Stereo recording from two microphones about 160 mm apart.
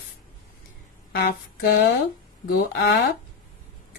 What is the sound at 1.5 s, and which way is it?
Speech, 70° left (ahead or behind).